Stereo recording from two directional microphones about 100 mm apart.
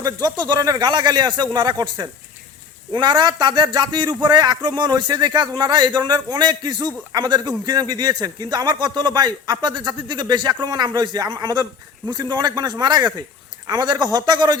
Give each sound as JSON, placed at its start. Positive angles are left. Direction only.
{"t": 0.0, "sound": "a man's voice", "side_deg": -40}